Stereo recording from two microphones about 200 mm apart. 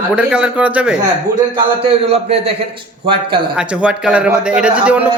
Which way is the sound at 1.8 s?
30° right (ahead or behind).